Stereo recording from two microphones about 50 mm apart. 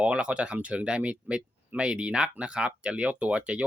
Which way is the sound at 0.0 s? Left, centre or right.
Right.